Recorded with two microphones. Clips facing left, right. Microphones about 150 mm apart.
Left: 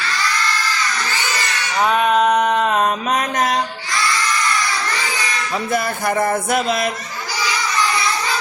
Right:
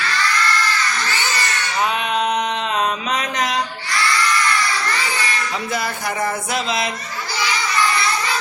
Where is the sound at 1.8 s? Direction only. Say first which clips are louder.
Left 6 dB; 45° left (ahead or behind).